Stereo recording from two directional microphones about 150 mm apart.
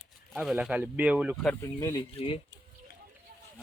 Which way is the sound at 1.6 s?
20° left (ahead or behind).